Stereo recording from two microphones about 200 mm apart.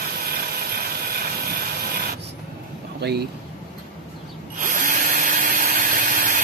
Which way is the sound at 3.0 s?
55° right (ahead or behind).